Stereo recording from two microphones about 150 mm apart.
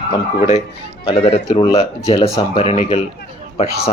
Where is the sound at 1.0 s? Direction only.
35° left (ahead or behind).